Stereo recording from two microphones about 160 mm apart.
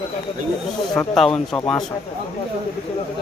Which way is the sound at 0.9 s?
5° left (ahead or behind).